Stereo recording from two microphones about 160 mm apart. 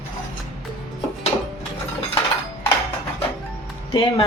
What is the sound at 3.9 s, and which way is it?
Speech, 35° left (ahead or behind).